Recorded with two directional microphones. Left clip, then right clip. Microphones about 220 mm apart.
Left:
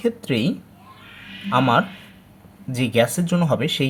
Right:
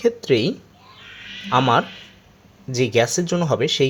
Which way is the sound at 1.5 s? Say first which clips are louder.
Right 1 dB; 30° right (ahead or behind).